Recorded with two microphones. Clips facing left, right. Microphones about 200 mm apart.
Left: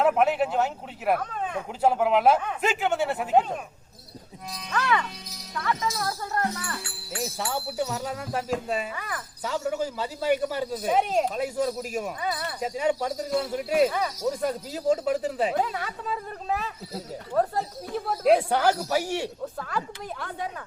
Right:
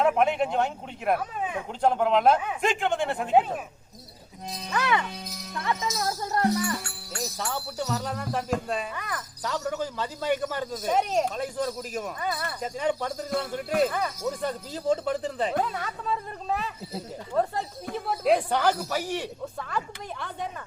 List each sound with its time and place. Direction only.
0.0 s speech: centre (ahead or behind)
1.3 s a sound: 10° right (ahead or behind)
1.8 s speech: 5° left (ahead or behind)
2.4 s speech: 5° right (ahead or behind)
2.6 s speech: 5° left (ahead or behind)
4.7 s speech: 20° right (ahead or behind)
6.8 s music: 40° right (ahead or behind)
7.3 s speech: 15° left (ahead or behind)
17.9 s chatter: centre (ahead or behind)
18.3 s speech: 10° left (ahead or behind)